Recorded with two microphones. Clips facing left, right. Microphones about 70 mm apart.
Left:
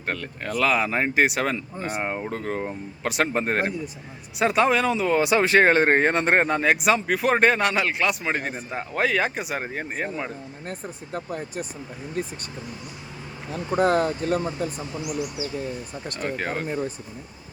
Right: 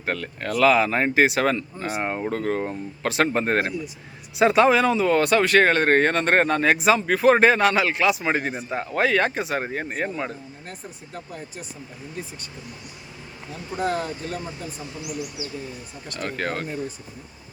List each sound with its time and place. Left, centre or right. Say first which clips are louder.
0.0 s speech: right 2 dB; centre
10.7 s speech: left 7 dB; left
13.5 s speech: left 5 dB; left
16.2 s speech: even; centre